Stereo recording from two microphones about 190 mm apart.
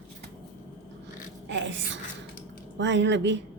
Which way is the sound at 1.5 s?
75° right (ahead or behind).